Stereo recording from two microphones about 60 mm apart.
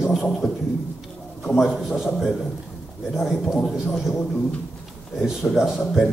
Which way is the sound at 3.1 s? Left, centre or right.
Centre.